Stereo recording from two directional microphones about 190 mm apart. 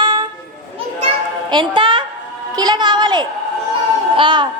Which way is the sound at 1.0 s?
25° right (ahead or behind).